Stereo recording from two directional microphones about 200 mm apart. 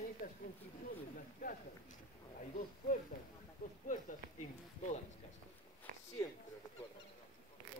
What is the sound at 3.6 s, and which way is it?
Speech, 45° left (ahead or behind).